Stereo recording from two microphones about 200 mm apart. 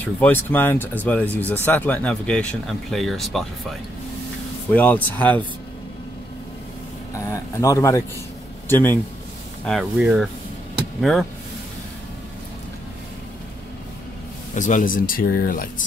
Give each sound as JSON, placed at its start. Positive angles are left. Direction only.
{"t": 0.2, "sound": "speech", "side_deg": 10}
{"t": 4.7, "sound": "speech", "side_deg": 10}
{"t": 7.2, "sound": "a man's voice", "side_deg": 15}
{"t": 9.7, "sound": "speech", "side_deg": -5}
{"t": 14.5, "sound": "speech", "side_deg": 40}